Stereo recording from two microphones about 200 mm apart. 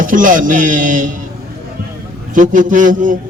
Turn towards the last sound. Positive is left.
turn(degrees=-40)  # may be behind; listen again after turning